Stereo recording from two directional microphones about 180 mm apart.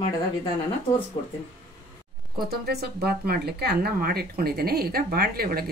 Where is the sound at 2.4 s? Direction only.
60° right (ahead or behind).